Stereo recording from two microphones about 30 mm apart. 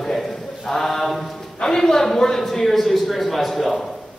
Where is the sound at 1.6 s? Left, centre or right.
Centre.